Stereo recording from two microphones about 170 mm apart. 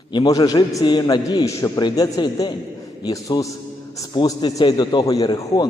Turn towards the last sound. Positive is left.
turn(degrees=20)  # may be behind; listen again after turning